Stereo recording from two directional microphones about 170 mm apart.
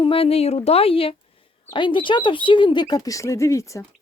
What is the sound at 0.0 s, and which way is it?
Speech, 35° left (ahead or behind).